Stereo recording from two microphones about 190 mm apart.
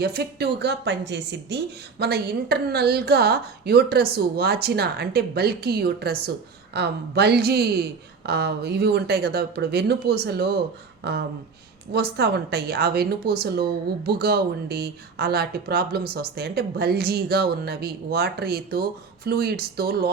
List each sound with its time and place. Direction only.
0.0 s speech: 60° right (ahead or behind)